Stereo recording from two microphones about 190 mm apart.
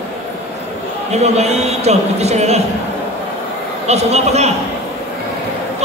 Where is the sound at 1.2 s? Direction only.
35° right (ahead or behind).